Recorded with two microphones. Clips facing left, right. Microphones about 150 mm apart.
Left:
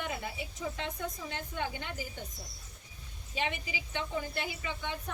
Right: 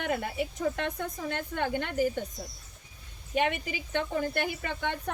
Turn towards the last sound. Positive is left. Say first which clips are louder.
# right 5 dB
turn(degrees=-60)  # may be behind; listen again after turning